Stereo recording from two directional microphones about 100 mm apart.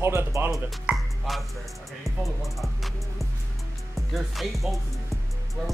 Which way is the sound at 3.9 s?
Centre (ahead or behind).